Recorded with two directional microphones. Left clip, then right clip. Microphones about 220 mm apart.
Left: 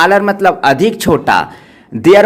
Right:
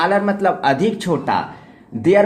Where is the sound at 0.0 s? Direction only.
30° left (ahead or behind).